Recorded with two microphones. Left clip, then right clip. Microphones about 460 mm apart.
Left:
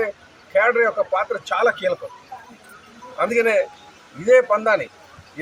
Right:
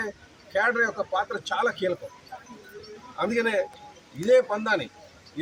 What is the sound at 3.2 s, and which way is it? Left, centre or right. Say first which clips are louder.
A man's voice: left 7 dB; right.